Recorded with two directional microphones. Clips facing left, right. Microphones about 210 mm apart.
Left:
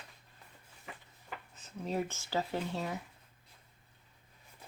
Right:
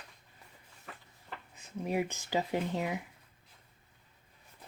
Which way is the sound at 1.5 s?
10° right (ahead or behind).